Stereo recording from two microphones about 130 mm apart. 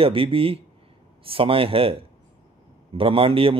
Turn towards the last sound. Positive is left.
turn(degrees=-45)  # may be behind; listen again after turning